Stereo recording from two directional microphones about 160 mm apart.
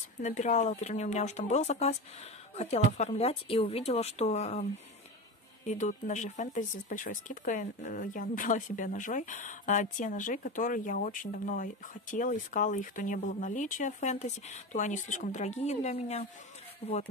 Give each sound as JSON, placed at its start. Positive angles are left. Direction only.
{"t": 0.2, "sound": "speech", "side_deg": 45}
{"t": 5.7, "sound": "speech", "side_deg": 50}